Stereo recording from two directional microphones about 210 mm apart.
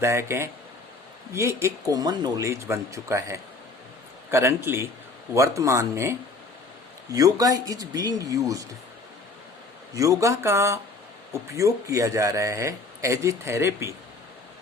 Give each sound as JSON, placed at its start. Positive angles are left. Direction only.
{"t": 0.0, "sound": "speech", "side_deg": -10}
{"t": 9.9, "sound": "speech", "side_deg": -15}